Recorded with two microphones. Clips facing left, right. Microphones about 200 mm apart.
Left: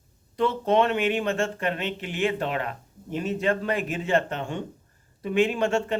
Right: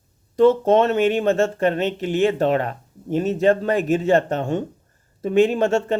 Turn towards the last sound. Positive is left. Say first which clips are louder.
# right 5 dB
turn(degrees=-40)  # may be behind; listen again after turning